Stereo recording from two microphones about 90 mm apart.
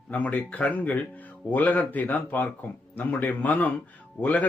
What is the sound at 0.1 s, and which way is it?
Speech, 15° left (ahead or behind).